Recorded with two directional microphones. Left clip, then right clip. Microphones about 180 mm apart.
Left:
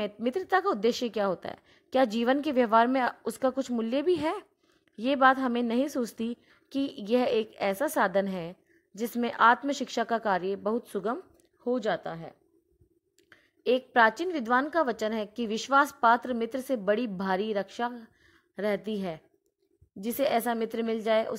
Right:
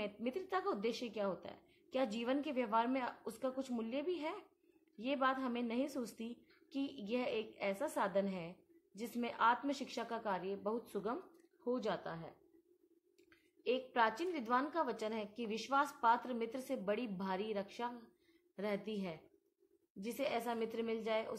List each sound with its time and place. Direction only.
0.0 s a woman's voice: 40° left (ahead or behind)